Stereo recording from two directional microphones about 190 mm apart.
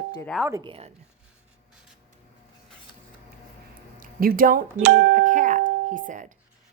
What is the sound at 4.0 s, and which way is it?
A woman's voice, 50° right (ahead or behind).